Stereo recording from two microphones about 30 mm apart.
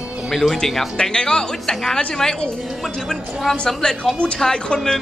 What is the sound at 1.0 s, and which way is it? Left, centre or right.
A woman's voice, left.